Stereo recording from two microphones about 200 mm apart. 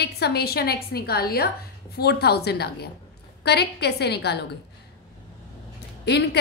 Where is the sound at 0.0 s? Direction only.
55° left (ahead or behind).